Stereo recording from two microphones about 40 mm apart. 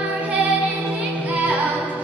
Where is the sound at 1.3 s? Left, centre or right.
Right.